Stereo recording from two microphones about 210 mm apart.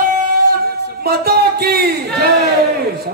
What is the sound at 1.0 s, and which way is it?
Music, 45° right (ahead or behind).